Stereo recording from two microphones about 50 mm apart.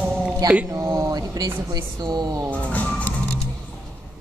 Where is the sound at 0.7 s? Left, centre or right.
Right.